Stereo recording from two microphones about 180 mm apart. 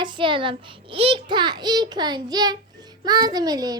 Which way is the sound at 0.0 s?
25° right (ahead or behind).